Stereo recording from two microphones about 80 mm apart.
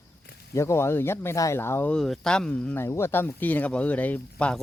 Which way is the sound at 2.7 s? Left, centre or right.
Left.